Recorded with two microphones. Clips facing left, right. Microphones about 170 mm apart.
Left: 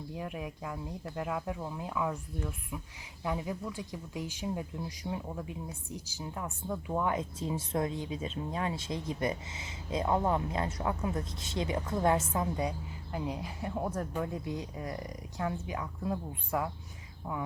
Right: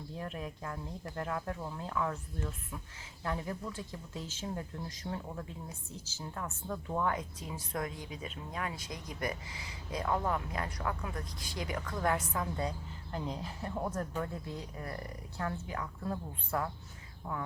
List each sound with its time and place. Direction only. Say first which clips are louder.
0.1 s speech: left 1 dB; 15° left (ahead or behind)
12.5 s speech: left 3 dB; 10° left (ahead or behind)